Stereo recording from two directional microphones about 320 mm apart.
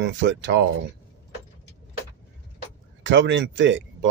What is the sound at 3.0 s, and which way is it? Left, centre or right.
Speech, right.